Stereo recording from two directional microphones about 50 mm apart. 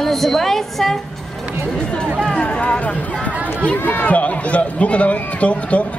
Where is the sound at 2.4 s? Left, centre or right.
Left.